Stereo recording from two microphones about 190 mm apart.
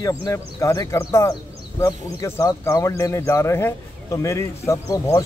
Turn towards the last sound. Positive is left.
turn(degrees=15)  # may be behind; listen again after turning